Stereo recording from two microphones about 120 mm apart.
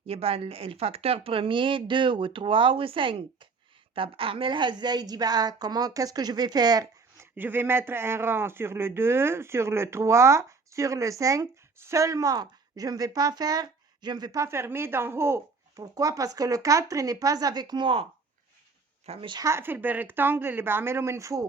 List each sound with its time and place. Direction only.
0.1 s a woman's voice: 55° right (ahead or behind); by 6.8 s 35° right (ahead or behind)
7.2 s a woman's voice: 15° right (ahead or behind); by 18.0 s 45° right (ahead or behind)
19.0 s speech: 55° right (ahead or behind)
19.3 s speech: 30° right (ahead or behind)